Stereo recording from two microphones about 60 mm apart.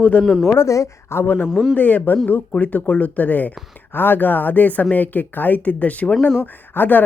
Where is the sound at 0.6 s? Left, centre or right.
Left.